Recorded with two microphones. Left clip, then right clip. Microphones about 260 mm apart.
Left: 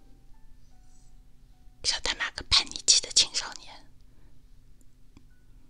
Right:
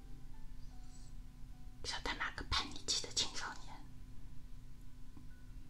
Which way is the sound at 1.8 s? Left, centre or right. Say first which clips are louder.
Left 12 dB; left.